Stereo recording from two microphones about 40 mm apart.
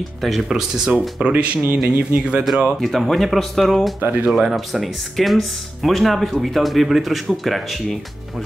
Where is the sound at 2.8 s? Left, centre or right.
Centre.